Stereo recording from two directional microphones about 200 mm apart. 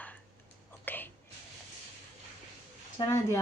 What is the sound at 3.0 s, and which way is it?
Speech, 25° left (ahead or behind).